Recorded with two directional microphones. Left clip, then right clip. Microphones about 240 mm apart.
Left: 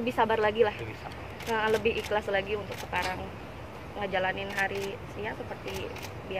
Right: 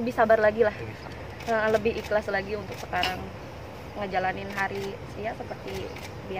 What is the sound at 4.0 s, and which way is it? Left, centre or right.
Speech, centre.